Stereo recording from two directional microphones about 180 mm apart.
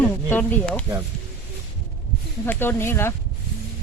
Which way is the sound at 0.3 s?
10° left (ahead or behind).